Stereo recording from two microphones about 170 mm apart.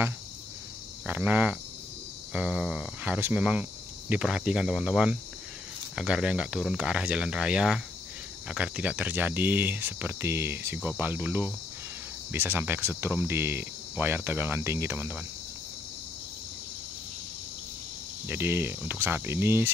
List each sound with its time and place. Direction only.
1.0 s speech: 10° right (ahead or behind)
18.2 s speech: 15° right (ahead or behind)